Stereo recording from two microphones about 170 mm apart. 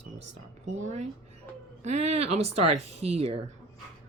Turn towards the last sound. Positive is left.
turn(degrees=-35)  # may be behind; listen again after turning